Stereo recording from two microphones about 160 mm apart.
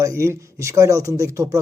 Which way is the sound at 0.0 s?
20° right (ahead or behind).